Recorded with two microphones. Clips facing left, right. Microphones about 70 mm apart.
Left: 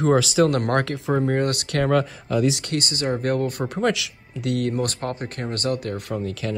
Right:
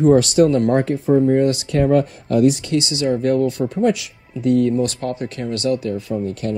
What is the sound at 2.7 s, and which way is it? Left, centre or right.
Speech, left.